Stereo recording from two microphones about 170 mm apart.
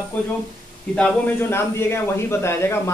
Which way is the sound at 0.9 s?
10° left (ahead or behind).